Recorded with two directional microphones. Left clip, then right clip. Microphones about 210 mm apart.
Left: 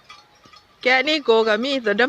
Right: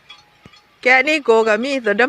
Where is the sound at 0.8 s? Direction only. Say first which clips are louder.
Right 4 dB; 10° right (ahead or behind).